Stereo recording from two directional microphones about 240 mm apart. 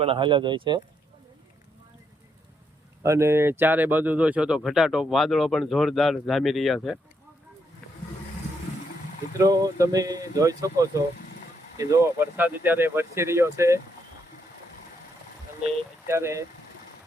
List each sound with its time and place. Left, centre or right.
0.0 s speech: right
3.0 s speech: centre
9.4 s speech: centre
16.0 s speech: centre